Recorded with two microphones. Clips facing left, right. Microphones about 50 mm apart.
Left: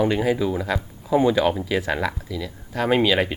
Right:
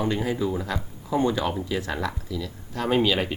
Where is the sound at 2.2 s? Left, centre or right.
Centre.